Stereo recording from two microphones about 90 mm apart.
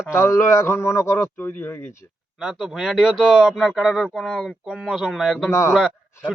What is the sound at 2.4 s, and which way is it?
Speech, 5° right (ahead or behind).